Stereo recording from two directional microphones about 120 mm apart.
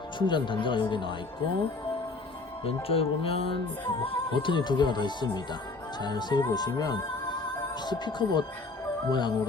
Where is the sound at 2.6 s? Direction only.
50° left (ahead or behind).